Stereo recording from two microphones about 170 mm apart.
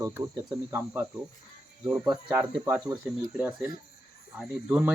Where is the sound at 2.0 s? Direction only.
20° right (ahead or behind).